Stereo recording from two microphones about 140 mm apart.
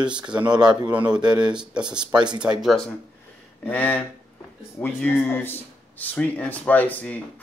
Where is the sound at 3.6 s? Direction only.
10° left (ahead or behind).